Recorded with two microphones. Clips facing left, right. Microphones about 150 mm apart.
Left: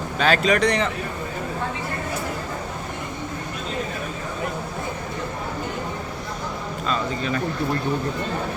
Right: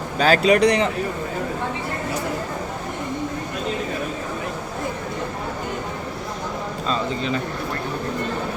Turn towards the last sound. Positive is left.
turn(degrees=-25)  # may be behind; listen again after turning